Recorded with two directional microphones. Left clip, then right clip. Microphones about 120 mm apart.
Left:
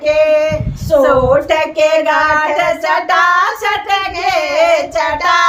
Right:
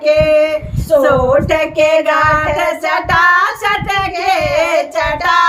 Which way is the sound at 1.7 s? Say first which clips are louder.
Right 1 dB; 25° right (ahead or behind).